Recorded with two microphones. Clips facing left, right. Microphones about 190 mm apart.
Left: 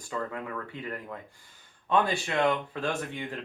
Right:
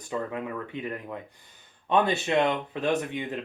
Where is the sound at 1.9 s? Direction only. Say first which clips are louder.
Right 3 dB; 20° right (ahead or behind).